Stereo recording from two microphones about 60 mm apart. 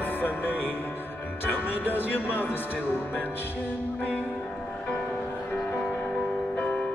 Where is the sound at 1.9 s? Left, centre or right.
Left.